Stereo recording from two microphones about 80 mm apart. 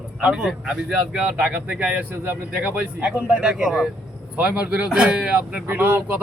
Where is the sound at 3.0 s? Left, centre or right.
Centre.